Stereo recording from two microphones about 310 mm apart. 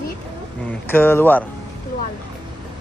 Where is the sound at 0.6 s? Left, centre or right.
Centre.